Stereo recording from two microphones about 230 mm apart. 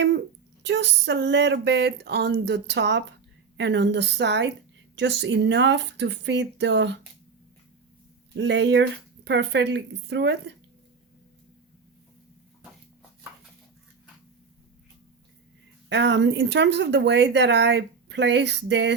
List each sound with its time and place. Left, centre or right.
0.6 s speech: right
8.4 s speech: right
15.9 s speech: right